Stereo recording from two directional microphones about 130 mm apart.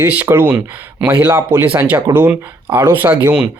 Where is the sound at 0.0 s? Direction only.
15° right (ahead or behind).